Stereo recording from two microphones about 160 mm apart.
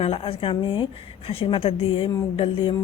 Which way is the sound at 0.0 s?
35° left (ahead or behind).